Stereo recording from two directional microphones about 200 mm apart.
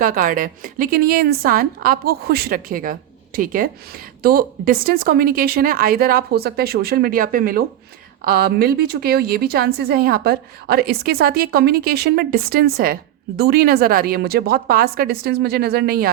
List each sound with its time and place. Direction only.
0.0 s a woman's voice: 45° right (ahead or behind)